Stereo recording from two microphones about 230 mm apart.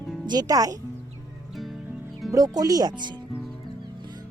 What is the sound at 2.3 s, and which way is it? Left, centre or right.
Speech, centre.